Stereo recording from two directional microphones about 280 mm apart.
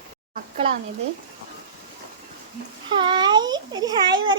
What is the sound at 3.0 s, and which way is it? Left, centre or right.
A child's voice, centre.